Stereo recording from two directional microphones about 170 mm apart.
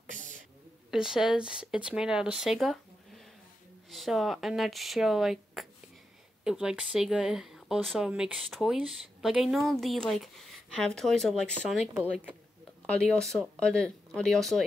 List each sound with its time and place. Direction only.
0.0 s a sound: 50° right (ahead or behind)
0.8 s speech: 5° right (ahead or behind)
11.9 s speech: 10° right (ahead or behind)
12.8 s speech: 5° left (ahead or behind)